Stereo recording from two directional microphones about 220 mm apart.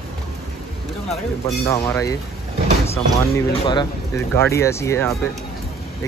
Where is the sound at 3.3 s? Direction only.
20° left (ahead or behind).